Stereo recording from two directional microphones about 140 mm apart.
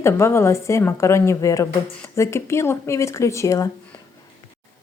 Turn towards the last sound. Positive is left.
turn(degrees=25)  # may be behind; listen again after turning